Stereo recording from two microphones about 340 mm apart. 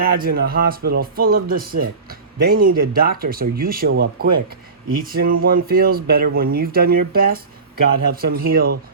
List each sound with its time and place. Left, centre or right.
0.0 s speech: right